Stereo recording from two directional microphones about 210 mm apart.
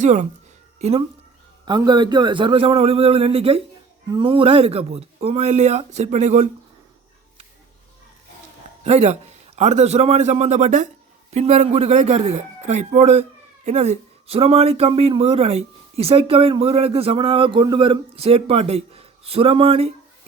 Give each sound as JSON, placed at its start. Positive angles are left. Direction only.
{"t": 0.0, "sound": "speech", "side_deg": -35}
{"t": 1.6, "sound": "speech", "side_deg": -20}
{"t": 8.8, "sound": "speech", "side_deg": -30}